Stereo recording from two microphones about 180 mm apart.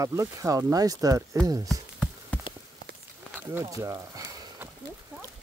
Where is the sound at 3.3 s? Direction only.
15° right (ahead or behind).